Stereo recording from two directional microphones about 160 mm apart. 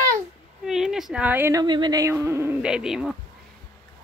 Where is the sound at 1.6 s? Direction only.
30° right (ahead or behind); by 3.1 s 5° right (ahead or behind).